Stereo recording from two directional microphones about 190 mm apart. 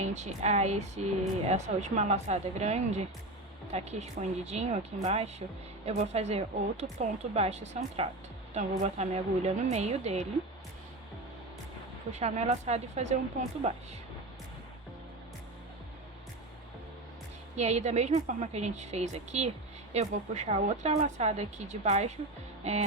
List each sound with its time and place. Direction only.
0.0 s speech: 35° right (ahead or behind)
12.1 s speech: 35° right (ahead or behind)
17.6 s speech: 35° right (ahead or behind)